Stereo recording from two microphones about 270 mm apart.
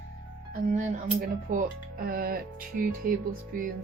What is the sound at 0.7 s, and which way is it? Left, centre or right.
Speech, right.